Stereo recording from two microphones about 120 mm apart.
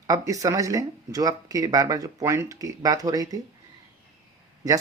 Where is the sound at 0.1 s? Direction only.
30° right (ahead or behind).